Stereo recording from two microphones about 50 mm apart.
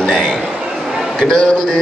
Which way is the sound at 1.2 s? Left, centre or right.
Centre.